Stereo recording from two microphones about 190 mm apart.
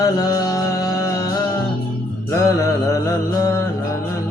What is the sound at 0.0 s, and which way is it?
Music, 20° left (ahead or behind).